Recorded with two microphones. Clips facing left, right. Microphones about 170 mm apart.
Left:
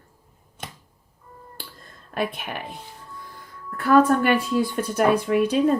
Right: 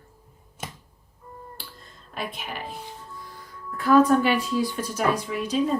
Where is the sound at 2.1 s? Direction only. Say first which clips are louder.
Left 6 dB; 55° left (ahead or behind).